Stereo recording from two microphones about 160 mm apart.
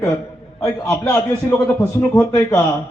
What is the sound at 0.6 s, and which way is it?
A man's voice, 20° left (ahead or behind).